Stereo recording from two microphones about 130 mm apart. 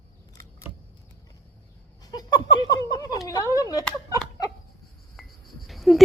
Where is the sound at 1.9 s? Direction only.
30° left (ahead or behind).